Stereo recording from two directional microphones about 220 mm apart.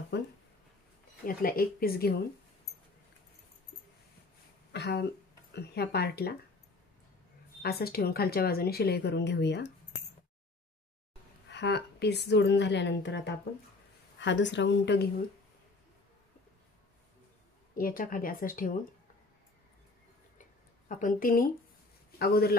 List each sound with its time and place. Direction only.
0.1 s a sound: 50° left (ahead or behind)
1.2 s speech: 40° left (ahead or behind)
4.7 s speech: 50° left (ahead or behind)
7.6 s speech: 45° left (ahead or behind)
11.5 s speech: 50° left (ahead or behind)
17.7 s speech: 40° left (ahead or behind)
21.0 s speech: 40° left (ahead or behind)